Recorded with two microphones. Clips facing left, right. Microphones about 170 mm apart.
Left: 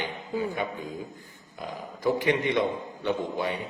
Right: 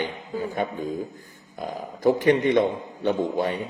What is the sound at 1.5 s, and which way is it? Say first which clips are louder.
A man's voice: right 5 dB; 45° right (ahead or behind).